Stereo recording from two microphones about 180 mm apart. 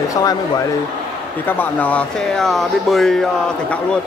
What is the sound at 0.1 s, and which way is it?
Speech, 20° left (ahead or behind).